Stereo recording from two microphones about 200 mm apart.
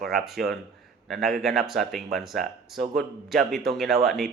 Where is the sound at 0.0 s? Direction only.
Centre (ahead or behind).